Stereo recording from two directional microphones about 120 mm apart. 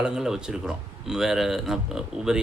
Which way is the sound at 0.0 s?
5° right (ahead or behind).